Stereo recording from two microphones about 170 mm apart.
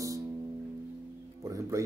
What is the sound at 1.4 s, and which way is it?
Speech, 20° right (ahead or behind).